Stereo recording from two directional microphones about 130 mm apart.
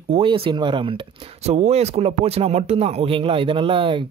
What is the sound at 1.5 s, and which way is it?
Speech, 55° right (ahead or behind).